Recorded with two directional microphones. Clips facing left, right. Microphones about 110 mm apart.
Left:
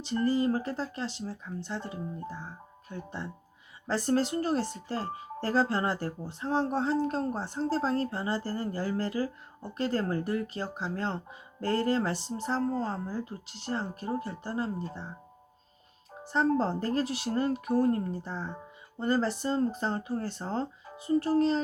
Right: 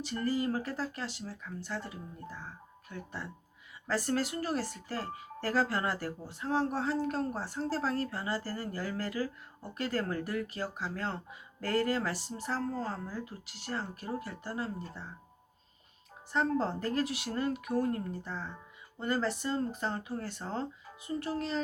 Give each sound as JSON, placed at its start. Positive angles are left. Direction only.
{"t": 0.0, "sound": "speech", "side_deg": 25}
{"t": 16.2, "sound": "speech", "side_deg": 30}